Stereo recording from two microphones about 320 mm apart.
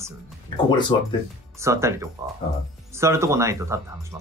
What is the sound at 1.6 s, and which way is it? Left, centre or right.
Speech, centre.